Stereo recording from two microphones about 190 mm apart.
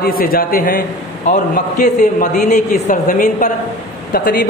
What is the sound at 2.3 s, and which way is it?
A woman's voice, 40° left (ahead or behind).